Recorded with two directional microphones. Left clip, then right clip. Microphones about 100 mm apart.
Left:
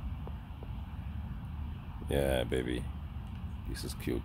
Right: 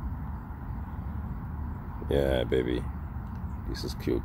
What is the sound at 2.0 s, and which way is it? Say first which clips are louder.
Speech: right 4 dB; 25° left (ahead or behind).